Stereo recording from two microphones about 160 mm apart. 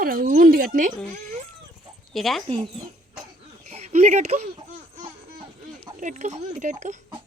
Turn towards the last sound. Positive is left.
turn(degrees=-50)  # may be behind; listen again after turning